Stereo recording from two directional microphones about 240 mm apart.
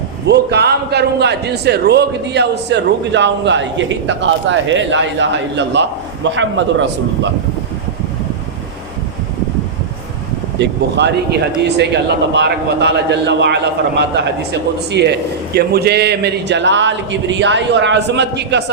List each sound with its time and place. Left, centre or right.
0.3 s a man's voice: right
10.6 s a man's voice: right